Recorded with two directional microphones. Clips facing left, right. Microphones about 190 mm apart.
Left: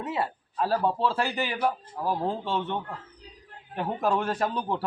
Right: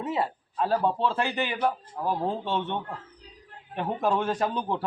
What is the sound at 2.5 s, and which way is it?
Speech, 20° right (ahead or behind).